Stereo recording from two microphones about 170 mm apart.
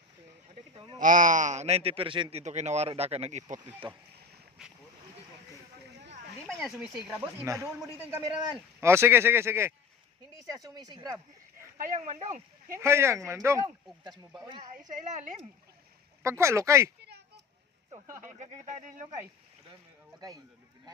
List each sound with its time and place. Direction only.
0.7 s speech: 35° right (ahead or behind)
0.9 s a man's voice: 50° right (ahead or behind); by 2.4 s 30° right (ahead or behind)
2.4 s a man's voice: 40° right (ahead or behind)
4.6 s boat: 5° right (ahead or behind)
6.5 s speech: centre (ahead or behind)
7.1 s speech: 15° right (ahead or behind)
11.8 s speech: 45° right (ahead or behind)
12.8 s speech: 15° right (ahead or behind)
14.8 s speech: 45° right (ahead or behind)
16.2 s speech: 15° right (ahead or behind)
17.0 s a sound: 75° right (ahead or behind)
18.3 s speech: 45° right (ahead or behind)
20.1 s speech: 20° right (ahead or behind)